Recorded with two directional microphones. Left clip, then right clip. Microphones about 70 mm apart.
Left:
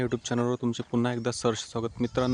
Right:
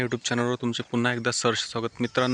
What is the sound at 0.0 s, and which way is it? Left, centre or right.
Speech, left.